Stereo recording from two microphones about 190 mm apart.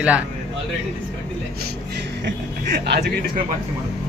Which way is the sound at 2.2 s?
60° right (ahead or behind).